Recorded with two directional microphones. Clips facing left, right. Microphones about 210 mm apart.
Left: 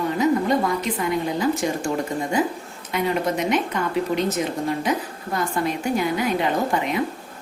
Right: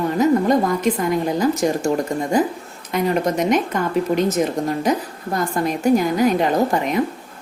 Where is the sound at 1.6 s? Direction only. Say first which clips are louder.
Right 5 dB; 40° right (ahead or behind).